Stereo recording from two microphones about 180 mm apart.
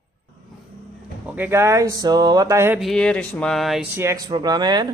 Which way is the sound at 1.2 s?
10° right (ahead or behind).